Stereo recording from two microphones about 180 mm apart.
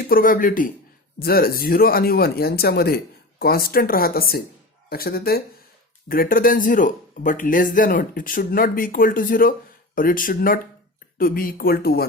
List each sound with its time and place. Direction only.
0.0 s speech: 55° left (ahead or behind)